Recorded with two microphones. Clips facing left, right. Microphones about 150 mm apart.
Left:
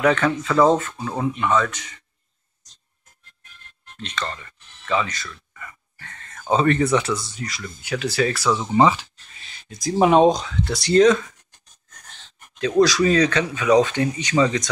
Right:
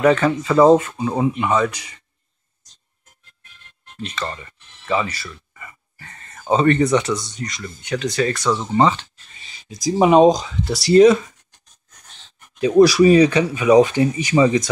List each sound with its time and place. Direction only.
0.0 s speech: 5° right (ahead or behind)
3.9 s speech: 5° right (ahead or behind)
12.5 s speech: 10° right (ahead or behind)